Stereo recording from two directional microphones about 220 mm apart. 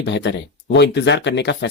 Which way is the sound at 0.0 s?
50° left (ahead or behind).